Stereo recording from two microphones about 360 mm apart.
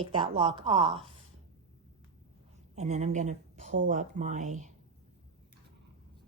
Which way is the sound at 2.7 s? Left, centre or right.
Centre.